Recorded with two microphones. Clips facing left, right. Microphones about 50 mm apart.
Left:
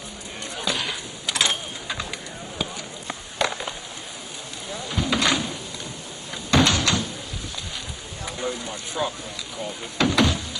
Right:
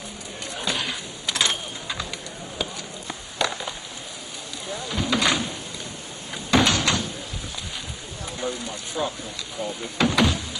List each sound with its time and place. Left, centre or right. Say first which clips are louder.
0.7 s a sound: left 1 dB; centre
3.1 s a sound: left 1 dB; left
4.8 s door: even; centre
6.5 s door: even; centre
8.4 s speech: even; centre
9.9 s door: even; centre